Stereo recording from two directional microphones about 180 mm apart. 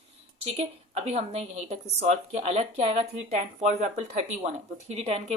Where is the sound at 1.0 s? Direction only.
35° right (ahead or behind).